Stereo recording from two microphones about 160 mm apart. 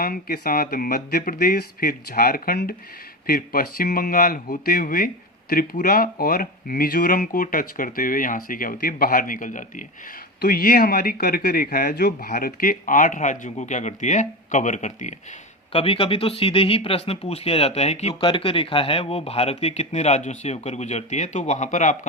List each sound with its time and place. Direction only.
0.0 s speech: 70° left (ahead or behind); by 9.8 s 55° left (ahead or behind)
10.4 s speech: 70° left (ahead or behind); by 15.1 s 50° left (ahead or behind)
15.7 s speech: 35° left (ahead or behind); by 21.9 s 50° left (ahead or behind)